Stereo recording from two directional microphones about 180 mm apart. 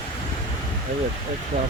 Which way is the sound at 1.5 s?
45° right (ahead or behind).